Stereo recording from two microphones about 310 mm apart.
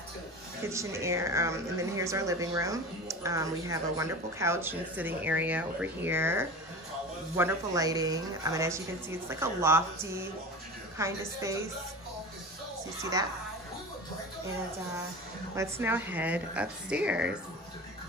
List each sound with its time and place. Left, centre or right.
0.7 s speech: centre
11.0 s speech: centre
15.5 s a woman's voice: centre